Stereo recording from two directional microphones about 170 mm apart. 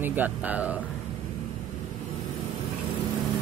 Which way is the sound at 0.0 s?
10° right (ahead or behind).